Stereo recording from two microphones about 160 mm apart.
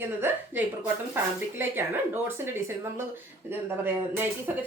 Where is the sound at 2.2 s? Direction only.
15° right (ahead or behind).